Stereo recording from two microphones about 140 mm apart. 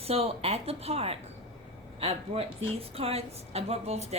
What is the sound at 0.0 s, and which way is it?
Speech, 45° right (ahead or behind).